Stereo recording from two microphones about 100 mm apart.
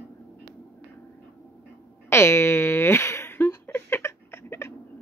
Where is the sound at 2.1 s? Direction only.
25° left (ahead or behind).